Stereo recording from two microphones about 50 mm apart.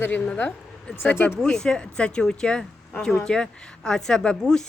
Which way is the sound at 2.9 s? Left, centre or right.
Left.